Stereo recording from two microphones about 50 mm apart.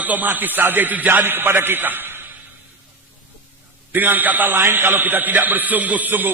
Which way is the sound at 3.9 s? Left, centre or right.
Right.